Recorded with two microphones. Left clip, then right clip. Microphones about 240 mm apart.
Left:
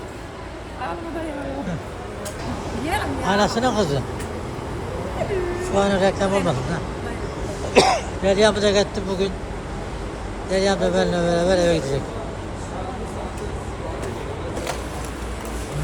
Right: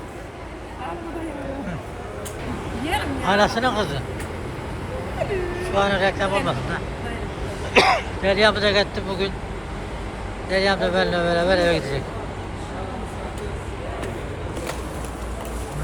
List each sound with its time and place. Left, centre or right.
2.8 s vehicle: centre
3.2 s speech: centre
5.6 s speech: centre
7.7 s speech: centre
10.5 s speech: centre